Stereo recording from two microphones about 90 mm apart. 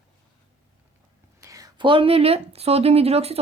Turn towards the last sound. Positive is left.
turn(degrees=-90)